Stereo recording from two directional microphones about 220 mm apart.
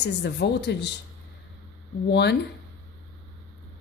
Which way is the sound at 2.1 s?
50° left (ahead or behind).